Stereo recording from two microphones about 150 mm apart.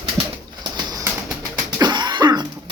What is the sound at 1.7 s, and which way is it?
Cough, 30° right (ahead or behind).